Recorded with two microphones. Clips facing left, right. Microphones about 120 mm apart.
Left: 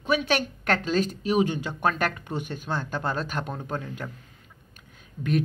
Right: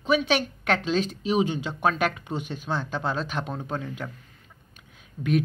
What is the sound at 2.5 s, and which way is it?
Speech, 5° left (ahead or behind).